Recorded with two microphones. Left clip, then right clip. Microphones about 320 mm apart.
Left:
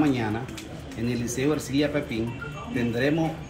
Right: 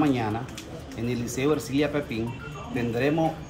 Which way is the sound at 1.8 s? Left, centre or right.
Centre.